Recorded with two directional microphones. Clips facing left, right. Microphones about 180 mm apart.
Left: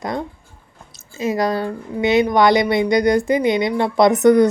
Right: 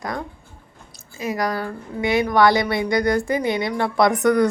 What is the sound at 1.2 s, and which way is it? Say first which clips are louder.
Speech: left 5 dB; 25° left (ahead or behind).